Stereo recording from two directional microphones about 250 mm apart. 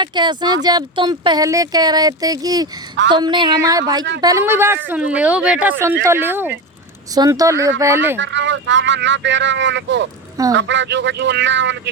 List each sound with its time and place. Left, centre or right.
0.0 s speech: centre
8.2 s speech: right